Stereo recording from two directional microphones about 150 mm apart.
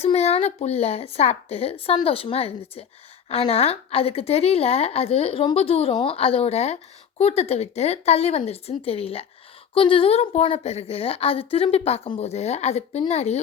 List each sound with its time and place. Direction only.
0.0 s a woman's voice: 45° left (ahead or behind)